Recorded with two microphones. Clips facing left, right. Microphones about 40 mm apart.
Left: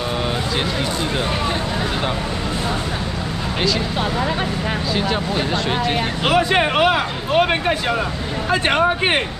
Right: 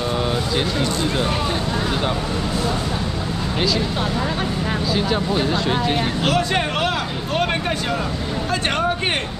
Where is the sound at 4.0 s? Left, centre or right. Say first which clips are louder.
Left 2 dB; centre.